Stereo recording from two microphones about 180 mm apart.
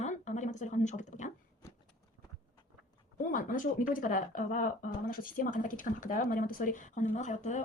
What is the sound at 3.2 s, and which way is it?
Speech, 50° left (ahead or behind).